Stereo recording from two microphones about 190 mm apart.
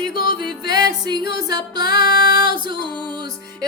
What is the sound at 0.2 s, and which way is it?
Music, 50° left (ahead or behind).